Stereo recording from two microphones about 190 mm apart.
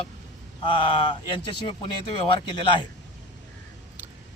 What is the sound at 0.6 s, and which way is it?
Speech, 25° left (ahead or behind).